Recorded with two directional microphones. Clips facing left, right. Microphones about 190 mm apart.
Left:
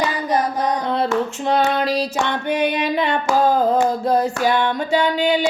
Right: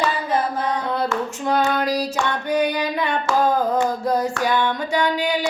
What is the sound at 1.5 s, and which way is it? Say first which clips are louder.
Music: left 1 dB; 25° left (ahead or behind).